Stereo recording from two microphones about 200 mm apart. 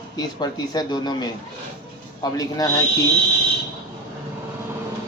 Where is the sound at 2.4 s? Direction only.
20° left (ahead or behind).